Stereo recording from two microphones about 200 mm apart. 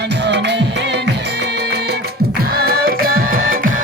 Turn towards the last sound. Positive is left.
turn(degrees=-45)  # may be behind; listen again after turning